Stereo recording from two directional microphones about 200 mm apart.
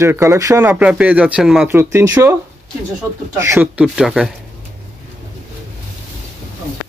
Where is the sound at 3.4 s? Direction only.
10° right (ahead or behind).